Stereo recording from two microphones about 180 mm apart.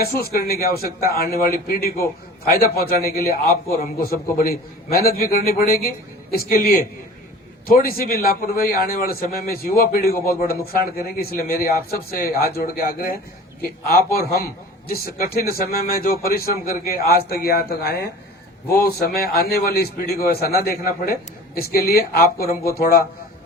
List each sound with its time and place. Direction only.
0.0 s a man's voice: 55° left (ahead or behind)